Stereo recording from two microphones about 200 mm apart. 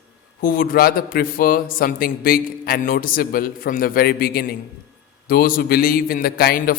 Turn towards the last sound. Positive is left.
turn(degrees=45)  # may be behind; listen again after turning